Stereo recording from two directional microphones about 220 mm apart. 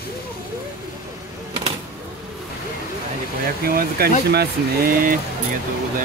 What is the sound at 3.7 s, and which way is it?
Speech, 45° right (ahead or behind).